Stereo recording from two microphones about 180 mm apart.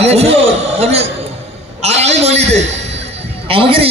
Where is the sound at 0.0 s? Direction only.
35° right (ahead or behind).